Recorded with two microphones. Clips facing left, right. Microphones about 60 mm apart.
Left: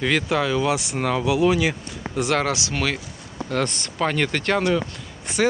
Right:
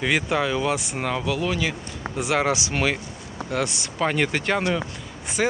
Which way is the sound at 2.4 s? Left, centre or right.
Centre.